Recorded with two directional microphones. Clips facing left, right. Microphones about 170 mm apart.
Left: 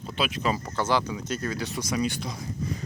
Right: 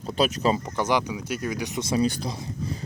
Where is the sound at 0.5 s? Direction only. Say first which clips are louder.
Right 2 dB; 20° right (ahead or behind); by 2.4 s 35° right (ahead or behind).